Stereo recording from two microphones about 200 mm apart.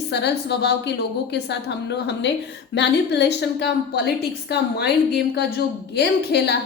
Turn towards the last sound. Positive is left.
turn(degrees=55)  # may be behind; listen again after turning